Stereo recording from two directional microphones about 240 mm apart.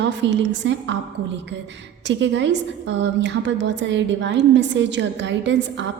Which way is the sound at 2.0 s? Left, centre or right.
Right.